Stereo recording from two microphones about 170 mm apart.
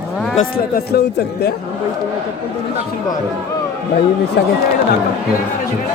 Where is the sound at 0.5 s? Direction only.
70° left (ahead or behind).